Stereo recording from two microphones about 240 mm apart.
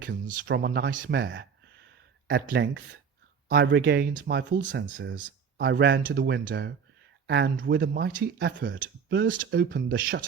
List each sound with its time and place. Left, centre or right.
0.0 s speech: right